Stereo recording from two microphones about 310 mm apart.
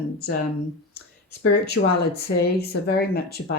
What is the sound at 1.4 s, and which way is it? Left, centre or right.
Speech, left.